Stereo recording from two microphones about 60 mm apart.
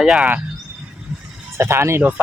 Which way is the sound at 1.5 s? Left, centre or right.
Right.